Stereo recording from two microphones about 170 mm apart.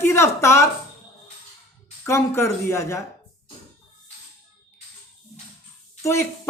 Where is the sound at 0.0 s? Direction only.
15° left (ahead or behind).